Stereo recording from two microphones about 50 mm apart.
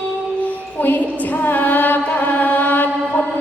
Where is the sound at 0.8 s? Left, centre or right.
Left.